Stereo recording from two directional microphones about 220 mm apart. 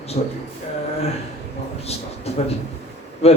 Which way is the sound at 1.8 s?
30° left (ahead or behind).